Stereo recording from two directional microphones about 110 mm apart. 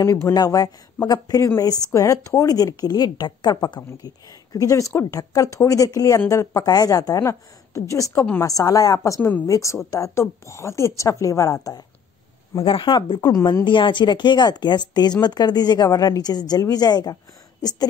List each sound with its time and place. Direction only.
0.0 s a woman's voice: 30° left (ahead or behind)
12.6 s a woman's voice: 45° left (ahead or behind)
13.7 s a woman's voice: 45° left (ahead or behind)